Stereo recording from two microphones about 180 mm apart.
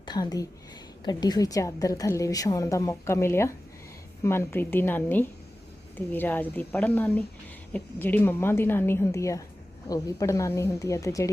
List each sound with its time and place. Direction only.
0.0 s a woman's voice: 25° left (ahead or behind)